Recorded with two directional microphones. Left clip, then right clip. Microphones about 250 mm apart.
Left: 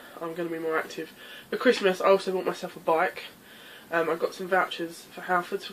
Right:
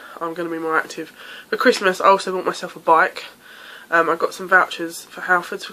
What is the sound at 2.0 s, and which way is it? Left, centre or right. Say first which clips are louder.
Speech: right 7 dB; centre.